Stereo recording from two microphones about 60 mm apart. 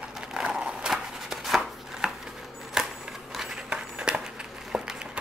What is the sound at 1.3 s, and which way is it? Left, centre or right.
Chopping, centre.